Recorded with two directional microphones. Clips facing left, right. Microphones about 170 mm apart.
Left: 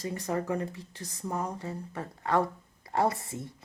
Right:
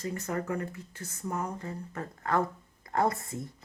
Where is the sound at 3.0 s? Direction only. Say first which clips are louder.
Even; 30° left (ahead or behind).